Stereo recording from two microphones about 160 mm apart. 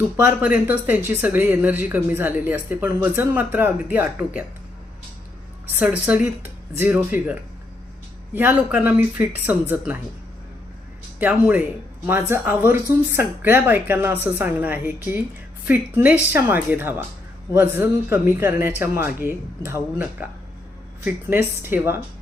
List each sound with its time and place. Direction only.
0.3 s speech: 10° right (ahead or behind)
5.8 s speech: 5° right (ahead or behind)
8.4 s speech: 10° right (ahead or behind)
11.2 s speech: 10° right (ahead or behind)